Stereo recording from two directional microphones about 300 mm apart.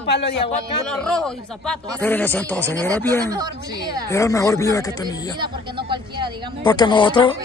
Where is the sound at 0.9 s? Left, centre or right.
Centre.